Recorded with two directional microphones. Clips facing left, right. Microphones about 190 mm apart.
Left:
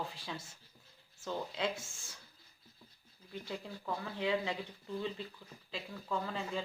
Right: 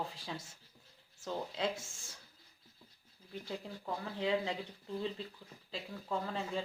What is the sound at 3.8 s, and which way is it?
Speech, 30° right (ahead or behind).